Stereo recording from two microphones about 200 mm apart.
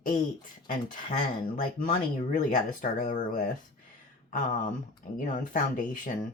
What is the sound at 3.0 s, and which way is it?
Speech, 45° left (ahead or behind).